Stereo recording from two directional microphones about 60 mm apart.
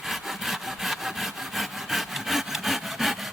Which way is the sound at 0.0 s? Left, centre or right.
Centre.